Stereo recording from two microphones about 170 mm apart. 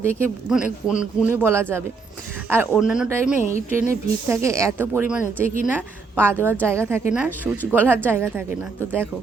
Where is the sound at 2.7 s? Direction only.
5° right (ahead or behind).